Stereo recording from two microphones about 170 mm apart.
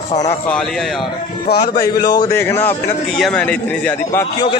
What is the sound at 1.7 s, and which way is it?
A man's voice, 20° left (ahead or behind).